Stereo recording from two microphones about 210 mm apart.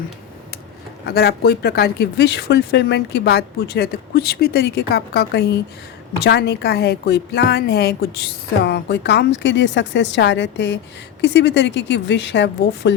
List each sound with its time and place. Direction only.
1.0 s a woman's voice: 50° left (ahead or behind)